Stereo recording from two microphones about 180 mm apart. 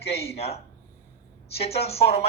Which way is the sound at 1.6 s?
35° left (ahead or behind).